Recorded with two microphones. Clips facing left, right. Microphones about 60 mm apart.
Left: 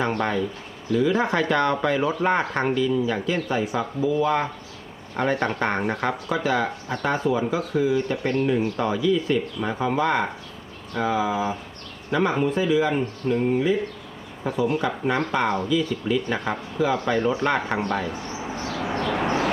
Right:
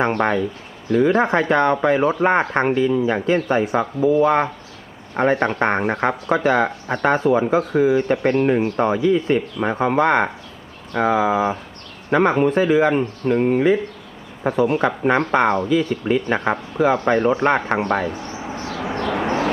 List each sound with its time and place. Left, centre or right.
0.0 s speech: right
1.3 s speech: right
5.1 s speech: right
18.4 s a sound: centre